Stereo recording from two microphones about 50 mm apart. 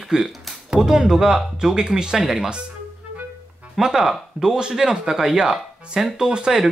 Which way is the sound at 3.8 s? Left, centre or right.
Centre.